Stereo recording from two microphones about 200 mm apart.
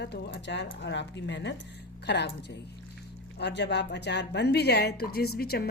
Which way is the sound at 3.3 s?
60° left (ahead or behind).